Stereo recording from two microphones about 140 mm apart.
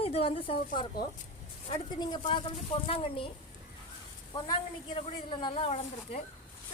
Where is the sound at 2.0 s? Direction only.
35° left (ahead or behind).